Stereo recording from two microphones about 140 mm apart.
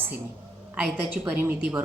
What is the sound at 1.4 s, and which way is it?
Speech, 10° right (ahead or behind).